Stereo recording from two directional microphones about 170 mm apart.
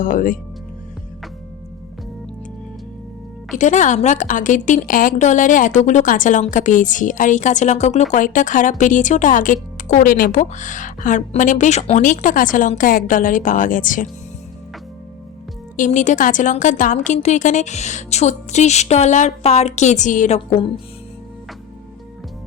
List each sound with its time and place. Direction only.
0.0 s speech: 50° left (ahead or behind)
3.6 s speech: 45° left (ahead or behind)
15.7 s speech: 45° left (ahead or behind)